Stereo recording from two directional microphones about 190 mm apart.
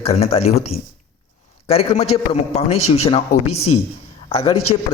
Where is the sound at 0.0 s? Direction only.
30° left (ahead or behind).